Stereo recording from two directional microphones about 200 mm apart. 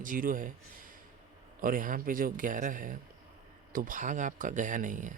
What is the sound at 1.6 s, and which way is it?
Speech, 45° right (ahead or behind).